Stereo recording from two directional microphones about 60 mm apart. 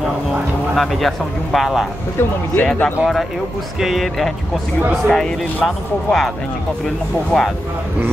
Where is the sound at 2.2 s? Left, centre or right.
Left.